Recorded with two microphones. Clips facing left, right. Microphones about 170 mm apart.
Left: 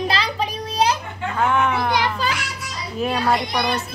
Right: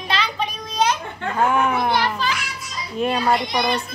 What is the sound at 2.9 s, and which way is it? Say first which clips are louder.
Speech: right 1 dB; centre (ahead or behind).